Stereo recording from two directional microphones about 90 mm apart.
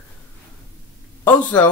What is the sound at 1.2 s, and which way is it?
Speech, 20° left (ahead or behind).